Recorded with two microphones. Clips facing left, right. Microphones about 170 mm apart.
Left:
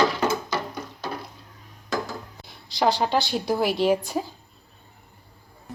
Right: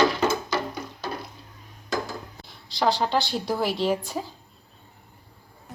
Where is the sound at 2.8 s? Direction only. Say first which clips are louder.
Left 1 dB; 15° left (ahead or behind).